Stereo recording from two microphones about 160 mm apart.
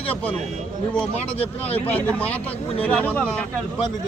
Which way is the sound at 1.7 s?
10° left (ahead or behind).